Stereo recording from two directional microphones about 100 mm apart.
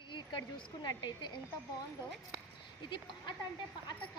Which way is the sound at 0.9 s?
50° left (ahead or behind).